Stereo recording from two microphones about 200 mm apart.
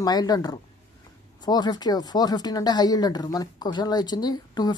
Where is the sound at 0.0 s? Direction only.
20° left (ahead or behind).